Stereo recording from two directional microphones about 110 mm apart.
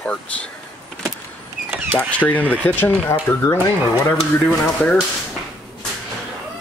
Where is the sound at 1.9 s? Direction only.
10° left (ahead or behind).